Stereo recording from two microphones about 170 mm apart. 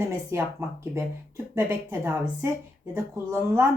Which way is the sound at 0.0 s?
15° right (ahead or behind).